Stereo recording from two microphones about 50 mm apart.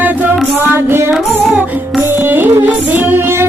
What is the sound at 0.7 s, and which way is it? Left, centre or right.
Music, right.